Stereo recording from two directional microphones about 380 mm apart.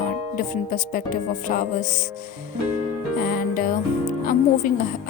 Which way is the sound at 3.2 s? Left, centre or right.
Left.